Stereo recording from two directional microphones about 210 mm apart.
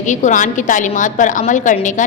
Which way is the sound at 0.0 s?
35° left (ahead or behind).